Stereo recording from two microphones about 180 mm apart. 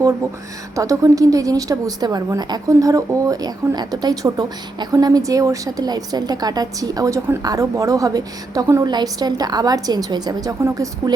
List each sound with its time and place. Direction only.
0.8 s a woman's voice: 20° right (ahead or behind)